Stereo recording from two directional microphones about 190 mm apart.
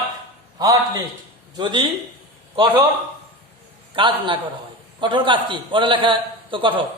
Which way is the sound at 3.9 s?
25° right (ahead or behind).